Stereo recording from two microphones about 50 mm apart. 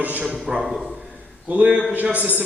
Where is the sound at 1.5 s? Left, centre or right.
Right.